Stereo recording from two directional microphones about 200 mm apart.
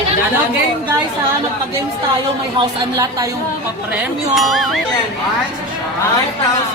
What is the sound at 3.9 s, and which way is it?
Speech, centre (ahead or behind).